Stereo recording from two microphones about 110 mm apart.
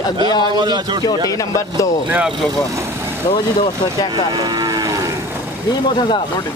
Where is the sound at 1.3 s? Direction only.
30° left (ahead or behind).